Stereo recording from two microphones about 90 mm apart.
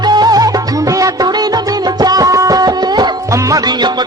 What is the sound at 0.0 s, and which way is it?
Music, 50° right (ahead or behind).